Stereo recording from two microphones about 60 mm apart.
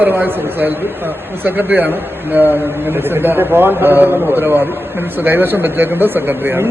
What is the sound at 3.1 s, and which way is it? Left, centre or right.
A man's voice, right.